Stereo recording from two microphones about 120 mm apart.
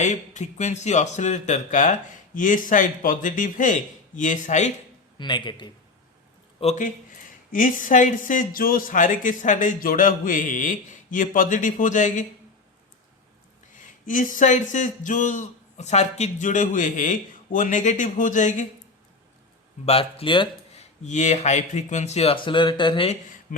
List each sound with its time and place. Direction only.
0.0 s speech: 75° left (ahead or behind)
5.1 s a man's voice: 40° left (ahead or behind)
6.6 s speech: 75° left (ahead or behind)
7.5 s speech: 90° left
14.0 s speech: 90° left
19.8 s speech: 55° left (ahead or behind)
20.7 s speech: 80° left; by 23.0 s 40° left (ahead or behind)